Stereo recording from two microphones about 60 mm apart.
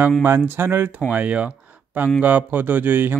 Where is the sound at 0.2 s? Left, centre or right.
Right.